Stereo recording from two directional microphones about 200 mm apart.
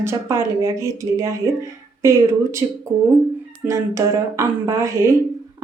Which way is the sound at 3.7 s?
15° right (ahead or behind).